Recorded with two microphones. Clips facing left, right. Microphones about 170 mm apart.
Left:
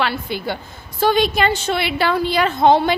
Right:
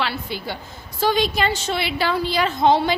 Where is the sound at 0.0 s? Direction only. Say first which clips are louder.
Left 4 dB; 55° left (ahead or behind).